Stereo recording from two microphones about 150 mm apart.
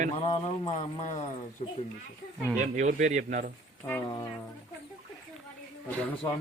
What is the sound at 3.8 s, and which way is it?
Speech, 20° left (ahead or behind).